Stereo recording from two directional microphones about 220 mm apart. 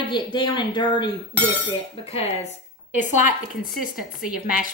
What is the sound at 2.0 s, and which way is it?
Speech, 25° left (ahead or behind).